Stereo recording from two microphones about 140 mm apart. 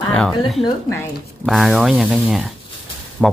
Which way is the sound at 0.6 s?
20° left (ahead or behind).